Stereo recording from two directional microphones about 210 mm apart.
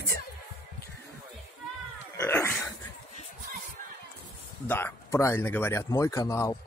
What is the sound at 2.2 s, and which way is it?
Dog, 10° left (ahead or behind).